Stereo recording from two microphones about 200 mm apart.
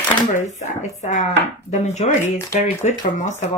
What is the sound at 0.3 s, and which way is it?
Speech, 35° left (ahead or behind).